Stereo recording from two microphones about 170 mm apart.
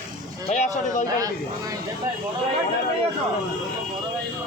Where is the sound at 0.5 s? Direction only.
45° left (ahead or behind).